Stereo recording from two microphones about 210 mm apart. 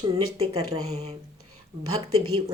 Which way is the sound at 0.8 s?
30° right (ahead or behind).